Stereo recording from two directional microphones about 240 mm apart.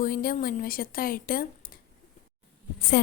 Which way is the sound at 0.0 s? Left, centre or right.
Left.